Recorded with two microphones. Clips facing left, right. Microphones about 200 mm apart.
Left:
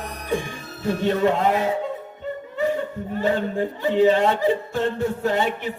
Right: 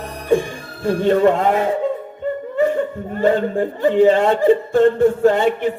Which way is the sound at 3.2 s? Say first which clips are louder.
Right 6 dB; 50° right (ahead or behind).